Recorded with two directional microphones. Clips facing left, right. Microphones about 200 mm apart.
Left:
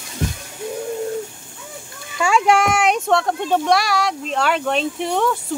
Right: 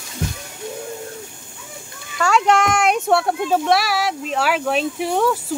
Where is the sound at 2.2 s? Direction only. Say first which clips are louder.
Even; 10° left (ahead or behind).